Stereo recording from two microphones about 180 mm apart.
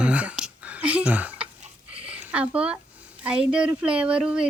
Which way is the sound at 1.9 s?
5° right (ahead or behind).